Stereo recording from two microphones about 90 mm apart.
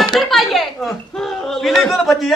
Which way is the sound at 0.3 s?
Centre (ahead or behind).